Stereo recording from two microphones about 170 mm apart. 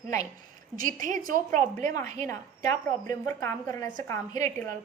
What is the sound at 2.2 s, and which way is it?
A woman's voice, 20° left (ahead or behind).